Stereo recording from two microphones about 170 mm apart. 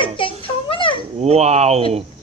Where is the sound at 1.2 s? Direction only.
40° right (ahead or behind).